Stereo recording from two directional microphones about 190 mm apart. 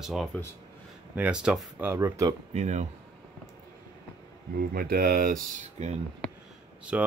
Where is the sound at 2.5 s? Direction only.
40° right (ahead or behind).